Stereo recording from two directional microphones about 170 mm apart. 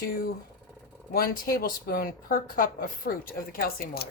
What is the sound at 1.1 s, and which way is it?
Speech, 60° left (ahead or behind).